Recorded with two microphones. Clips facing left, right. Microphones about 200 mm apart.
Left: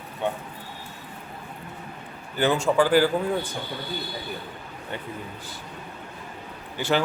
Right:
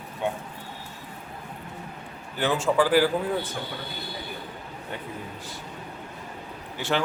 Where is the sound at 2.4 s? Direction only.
Centre (ahead or behind).